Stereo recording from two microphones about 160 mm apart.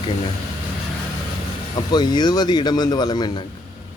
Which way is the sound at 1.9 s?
25° left (ahead or behind).